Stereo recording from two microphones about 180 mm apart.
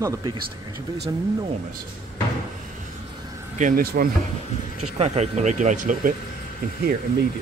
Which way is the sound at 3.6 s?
50° right (ahead or behind).